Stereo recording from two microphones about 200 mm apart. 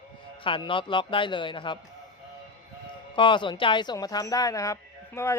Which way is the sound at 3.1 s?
25° left (ahead or behind).